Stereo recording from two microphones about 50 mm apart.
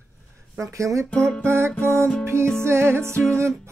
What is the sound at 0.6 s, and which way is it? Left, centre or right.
Speech, right.